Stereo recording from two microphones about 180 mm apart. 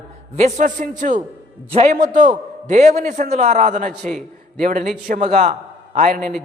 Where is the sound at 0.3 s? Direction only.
40° right (ahead or behind).